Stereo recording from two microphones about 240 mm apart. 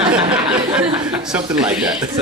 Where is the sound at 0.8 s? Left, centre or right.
Right.